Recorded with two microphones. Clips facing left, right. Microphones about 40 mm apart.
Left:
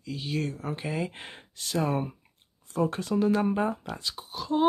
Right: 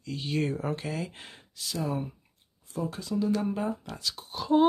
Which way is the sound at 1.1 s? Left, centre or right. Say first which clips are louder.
Left 4 dB; left.